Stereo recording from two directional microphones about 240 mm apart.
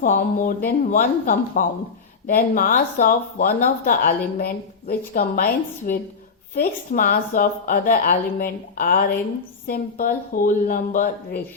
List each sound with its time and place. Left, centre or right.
0.0 s speech: left